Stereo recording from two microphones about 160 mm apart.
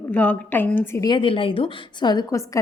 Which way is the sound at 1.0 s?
30° left (ahead or behind).